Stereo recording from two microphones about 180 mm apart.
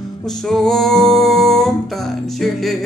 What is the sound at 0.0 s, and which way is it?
Music, centre (ahead or behind).